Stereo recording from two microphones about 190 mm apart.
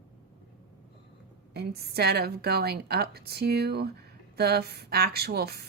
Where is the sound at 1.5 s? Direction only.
55° right (ahead or behind).